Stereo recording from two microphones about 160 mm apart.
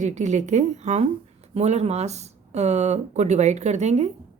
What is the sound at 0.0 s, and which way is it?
A woman's voice, 45° right (ahead or behind).